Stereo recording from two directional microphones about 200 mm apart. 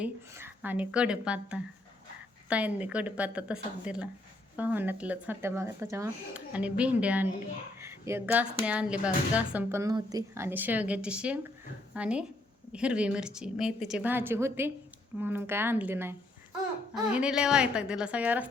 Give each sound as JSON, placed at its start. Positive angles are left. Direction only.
{"t": 0.0, "sound": "speech", "side_deg": -10}
{"t": 7.8, "sound": "a sound", "side_deg": -15}
{"t": 8.6, "sound": "a woman's voice", "side_deg": -5}